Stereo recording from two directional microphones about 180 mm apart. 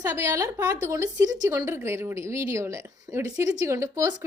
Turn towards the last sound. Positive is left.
turn(degrees=-15)  # may be behind; listen again after turning